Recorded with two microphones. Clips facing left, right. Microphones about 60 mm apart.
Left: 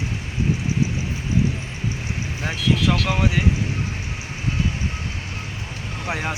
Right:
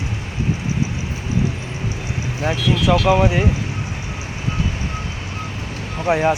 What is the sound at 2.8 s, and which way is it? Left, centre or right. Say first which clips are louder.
Speech: right 6 dB; right.